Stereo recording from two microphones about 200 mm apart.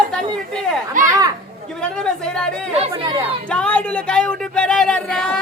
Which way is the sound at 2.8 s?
20° right (ahead or behind).